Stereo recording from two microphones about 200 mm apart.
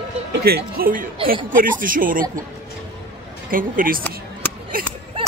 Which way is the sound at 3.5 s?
45° right (ahead or behind).